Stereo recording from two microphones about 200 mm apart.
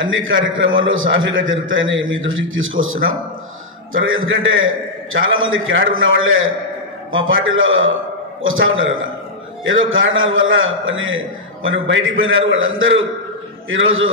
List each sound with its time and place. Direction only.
0.0 s a man's voice: 75° right (ahead or behind)